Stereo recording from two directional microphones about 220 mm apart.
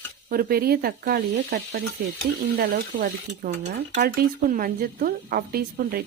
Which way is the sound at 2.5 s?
40° right (ahead or behind).